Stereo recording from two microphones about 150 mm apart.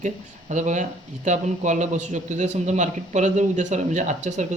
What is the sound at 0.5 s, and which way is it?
Speech, 55° right (ahead or behind).